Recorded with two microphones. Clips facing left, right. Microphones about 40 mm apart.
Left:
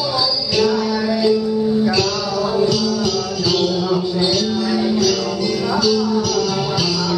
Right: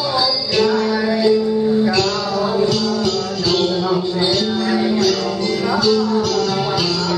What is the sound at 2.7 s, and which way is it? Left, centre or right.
Music, centre.